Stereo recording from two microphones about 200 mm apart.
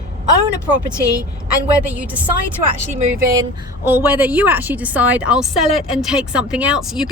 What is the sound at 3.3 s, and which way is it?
A woman's voice, 15° right (ahead or behind).